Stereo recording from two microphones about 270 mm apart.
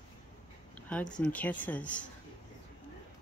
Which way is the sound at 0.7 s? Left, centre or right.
Centre.